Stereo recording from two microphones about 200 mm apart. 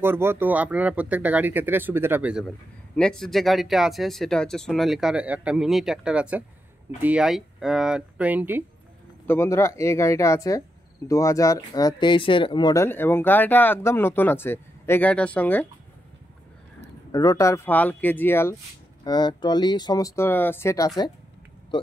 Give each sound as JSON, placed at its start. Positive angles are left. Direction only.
{"t": 0.0, "sound": "speech", "side_deg": -10}
{"t": 9.3, "sound": "speech", "side_deg": 15}
{"t": 17.1, "sound": "speech", "side_deg": 15}